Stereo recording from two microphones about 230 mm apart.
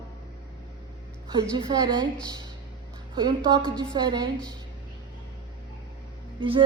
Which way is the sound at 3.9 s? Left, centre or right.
Centre.